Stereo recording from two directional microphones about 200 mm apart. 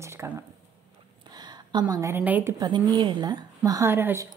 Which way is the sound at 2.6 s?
20° right (ahead or behind).